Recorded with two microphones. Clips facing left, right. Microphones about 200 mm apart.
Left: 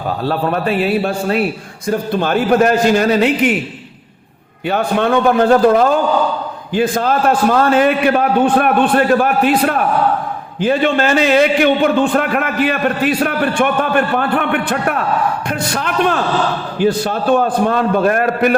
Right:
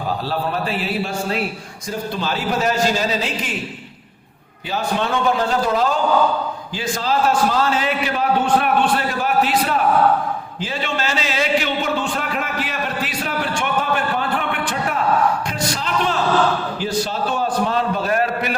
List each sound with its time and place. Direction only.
0.3 s a man's voice: 60° left (ahead or behind)
4.7 s a man's voice: 60° left (ahead or behind)